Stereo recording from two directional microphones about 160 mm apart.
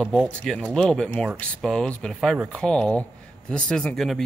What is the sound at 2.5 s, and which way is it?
Speech, 5° left (ahead or behind).